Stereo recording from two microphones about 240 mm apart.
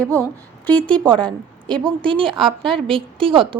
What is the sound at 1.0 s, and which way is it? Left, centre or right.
Speech, centre.